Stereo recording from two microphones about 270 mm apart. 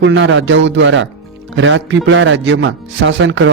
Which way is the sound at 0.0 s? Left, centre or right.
Right.